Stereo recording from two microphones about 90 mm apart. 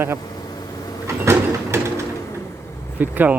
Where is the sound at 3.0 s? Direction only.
20° right (ahead or behind).